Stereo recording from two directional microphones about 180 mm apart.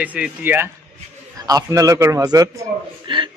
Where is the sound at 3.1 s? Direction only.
25° right (ahead or behind).